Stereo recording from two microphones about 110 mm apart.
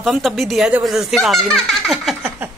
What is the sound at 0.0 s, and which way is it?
A woman's voice, centre (ahead or behind).